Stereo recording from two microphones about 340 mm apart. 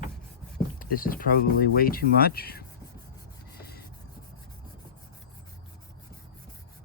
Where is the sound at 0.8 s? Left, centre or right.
Left.